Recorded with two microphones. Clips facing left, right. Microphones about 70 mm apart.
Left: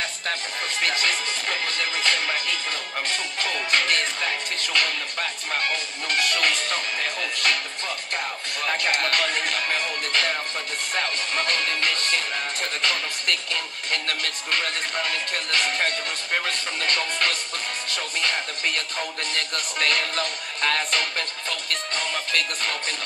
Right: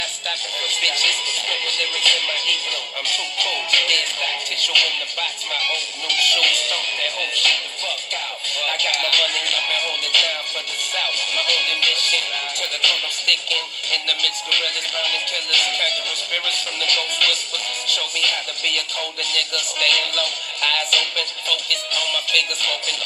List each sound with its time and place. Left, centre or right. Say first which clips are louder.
0.3 s music: right 1 dB; left
8.5 s music: even; left
17.8 s speech: right 3 dB; left